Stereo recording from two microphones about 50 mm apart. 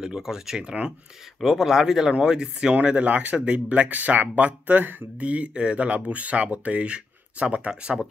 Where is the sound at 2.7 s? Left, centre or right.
Right.